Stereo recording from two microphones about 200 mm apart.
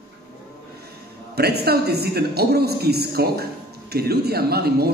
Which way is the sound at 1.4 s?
50° right (ahead or behind).